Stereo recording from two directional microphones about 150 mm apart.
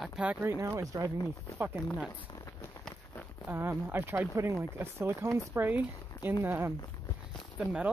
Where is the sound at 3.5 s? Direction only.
15° right (ahead or behind).